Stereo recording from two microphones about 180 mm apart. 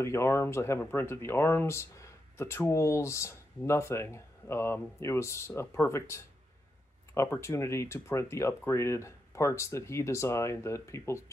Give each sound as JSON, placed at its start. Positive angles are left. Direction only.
{"t": 0.0, "sound": "speech", "side_deg": 15}